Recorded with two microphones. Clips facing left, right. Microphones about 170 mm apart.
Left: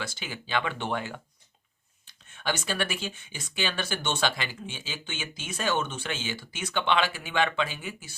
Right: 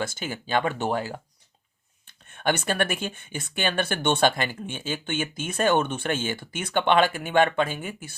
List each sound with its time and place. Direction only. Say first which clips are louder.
0.0 s speech: right 6 dB; 50° right (ahead or behind)
2.0 s speech: right 6 dB; 55° right (ahead or behind)